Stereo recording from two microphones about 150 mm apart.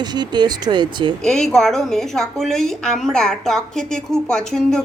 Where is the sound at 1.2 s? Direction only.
5° left (ahead or behind).